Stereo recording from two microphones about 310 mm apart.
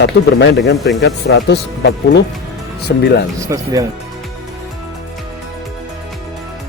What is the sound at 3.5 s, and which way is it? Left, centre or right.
Speech, centre.